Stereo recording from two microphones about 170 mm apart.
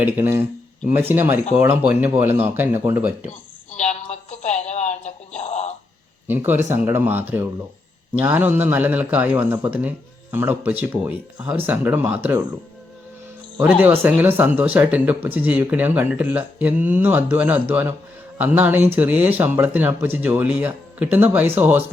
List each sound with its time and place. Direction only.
0.0 s speech: 10° right (ahead or behind)
3.8 s music: 40° left (ahead or behind)
5.4 s a sound: 40° left (ahead or behind)
6.2 s speech: 10° right (ahead or behind)
13.6 s speech: 10° right (ahead or behind)